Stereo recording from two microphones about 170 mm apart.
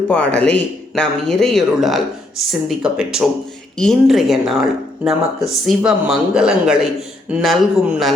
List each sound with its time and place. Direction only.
0.1 s speech: 10° left (ahead or behind)